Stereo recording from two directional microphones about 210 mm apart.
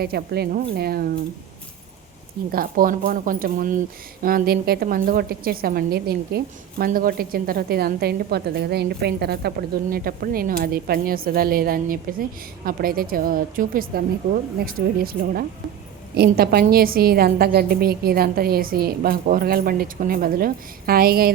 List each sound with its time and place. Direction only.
0.0 s speech: 50° right (ahead or behind)
2.5 s speech: 45° right (ahead or behind)